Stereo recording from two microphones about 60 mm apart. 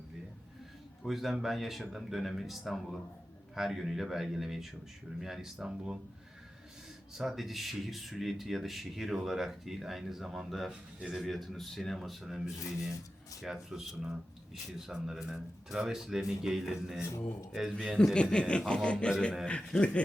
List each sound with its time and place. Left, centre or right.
1.0 s speech: centre
7.2 s speech: centre
13.4 s speech: centre
17.7 s a man's voice: centre